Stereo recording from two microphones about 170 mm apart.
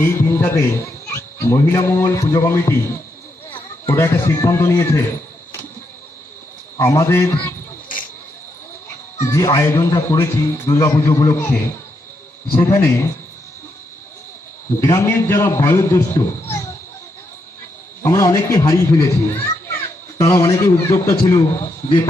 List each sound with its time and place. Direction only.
0.0 s speech: 10° left (ahead or behind)
3.8 s speech: 15° left (ahead or behind)
6.7 s a man's voice: 20° left (ahead or behind)
9.1 s speech: 20° left (ahead or behind)
14.8 s speech: 15° left (ahead or behind)
18.0 s a child's voice: 20° left (ahead or behind)